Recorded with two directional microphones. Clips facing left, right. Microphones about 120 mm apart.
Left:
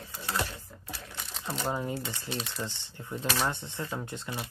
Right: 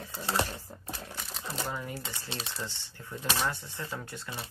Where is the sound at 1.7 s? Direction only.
25° left (ahead or behind).